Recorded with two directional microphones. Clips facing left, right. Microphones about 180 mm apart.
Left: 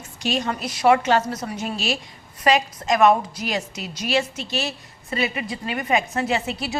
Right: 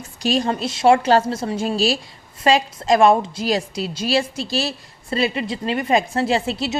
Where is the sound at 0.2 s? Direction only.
35° right (ahead or behind).